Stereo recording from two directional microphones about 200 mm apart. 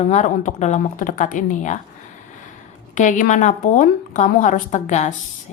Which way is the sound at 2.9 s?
40° left (ahead or behind).